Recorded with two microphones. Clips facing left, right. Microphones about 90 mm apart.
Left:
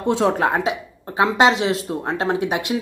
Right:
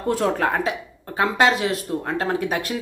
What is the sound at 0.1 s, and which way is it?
Speech, 20° left (ahead or behind).